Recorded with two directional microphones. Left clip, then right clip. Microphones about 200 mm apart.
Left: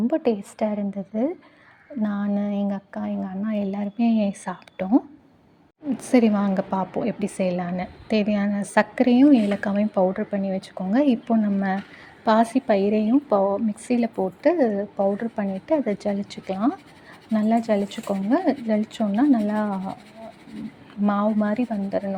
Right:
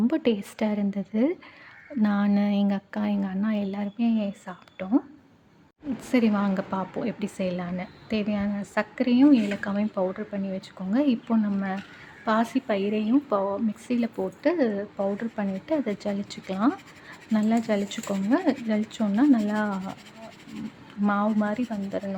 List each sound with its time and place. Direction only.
0.1 s a woman's voice: centre (ahead or behind)
3.9 s a woman's voice: 20° left (ahead or behind)
6.0 s a woman's voice: 15° left (ahead or behind); by 20.0 s centre (ahead or behind)
21.1 s a woman's voice: 10° left (ahead or behind)